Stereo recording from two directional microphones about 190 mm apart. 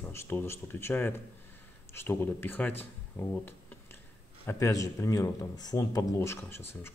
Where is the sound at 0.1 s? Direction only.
10° left (ahead or behind).